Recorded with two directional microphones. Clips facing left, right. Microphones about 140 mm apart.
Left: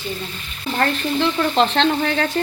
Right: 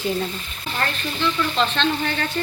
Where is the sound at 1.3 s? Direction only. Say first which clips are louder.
Left 4 dB; 45° left (ahead or behind).